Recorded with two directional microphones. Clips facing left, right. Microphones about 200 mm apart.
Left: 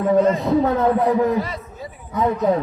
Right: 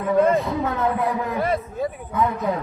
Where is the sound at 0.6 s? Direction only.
35° left (ahead or behind).